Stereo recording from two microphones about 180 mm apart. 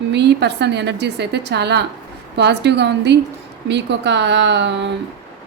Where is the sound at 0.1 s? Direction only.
70° right (ahead or behind).